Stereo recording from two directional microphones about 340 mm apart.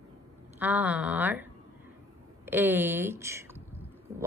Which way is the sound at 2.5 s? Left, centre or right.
Centre.